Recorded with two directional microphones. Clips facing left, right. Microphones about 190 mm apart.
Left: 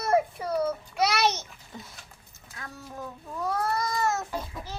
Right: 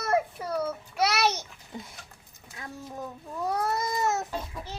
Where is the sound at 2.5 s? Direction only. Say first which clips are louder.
Right 2 dB; 20° right (ahead or behind).